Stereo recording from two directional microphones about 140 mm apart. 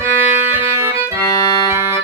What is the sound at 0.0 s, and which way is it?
Music, 15° right (ahead or behind).